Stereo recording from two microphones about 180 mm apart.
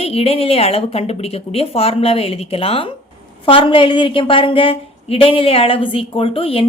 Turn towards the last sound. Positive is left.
turn(degrees=30)  # may be behind; listen again after turning